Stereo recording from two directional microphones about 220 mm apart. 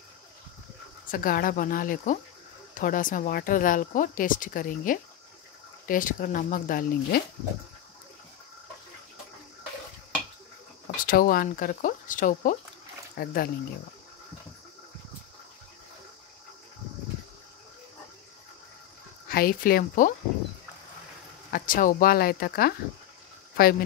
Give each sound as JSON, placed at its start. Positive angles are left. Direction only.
{"t": 1.1, "sound": "speech", "side_deg": 40}
{"t": 11.0, "sound": "speech", "side_deg": 40}
{"t": 19.2, "sound": "speech", "side_deg": 45}
{"t": 21.5, "sound": "speech", "side_deg": 40}